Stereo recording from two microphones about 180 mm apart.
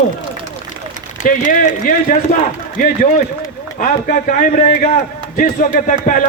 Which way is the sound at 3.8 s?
45° left (ahead or behind).